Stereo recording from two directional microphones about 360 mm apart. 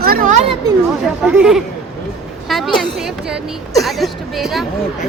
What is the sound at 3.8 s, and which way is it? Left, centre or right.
Speech, centre.